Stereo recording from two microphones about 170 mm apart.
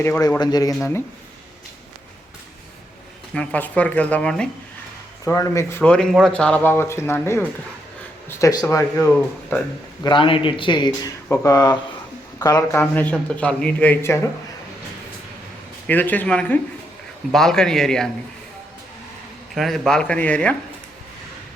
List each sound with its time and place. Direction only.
0.0 s a man's voice: 15° left (ahead or behind)
3.3 s speech: 10° left (ahead or behind)
5.2 s a man's voice: 15° left (ahead or behind)
10.0 s a man's voice: 30° left (ahead or behind)
12.8 s speech: 10° left (ahead or behind)
15.9 s speech: 10° left (ahead or behind)
19.5 s speech: centre (ahead or behind)